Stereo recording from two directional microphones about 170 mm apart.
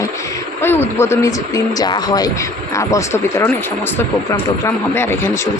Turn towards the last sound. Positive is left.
turn(degrees=15)  # may be behind; listen again after turning